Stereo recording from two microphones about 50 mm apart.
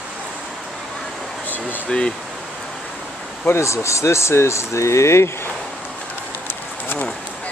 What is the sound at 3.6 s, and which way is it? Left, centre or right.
Speech, left.